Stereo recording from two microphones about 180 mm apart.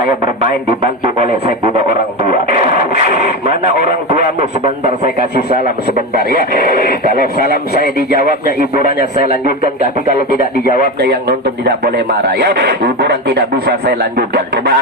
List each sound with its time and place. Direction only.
2.5 s radio: 60° left (ahead or behind)
7.2 s a man's voice: 60° left (ahead or behind)
12.3 s a man's voice: 60° right (ahead or behind)